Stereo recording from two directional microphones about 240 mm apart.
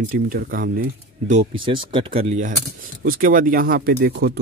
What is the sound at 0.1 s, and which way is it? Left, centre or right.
Speech, right.